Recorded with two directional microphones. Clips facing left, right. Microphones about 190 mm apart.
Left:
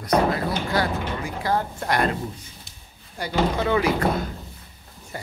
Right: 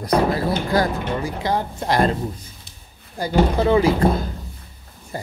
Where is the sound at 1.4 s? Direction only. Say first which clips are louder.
Right 2 dB; 20° right (ahead or behind).